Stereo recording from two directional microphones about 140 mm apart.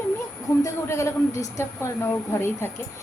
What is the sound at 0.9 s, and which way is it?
A woman's voice, 20° left (ahead or behind).